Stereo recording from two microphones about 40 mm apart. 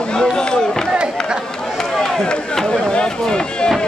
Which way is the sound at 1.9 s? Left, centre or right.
Centre.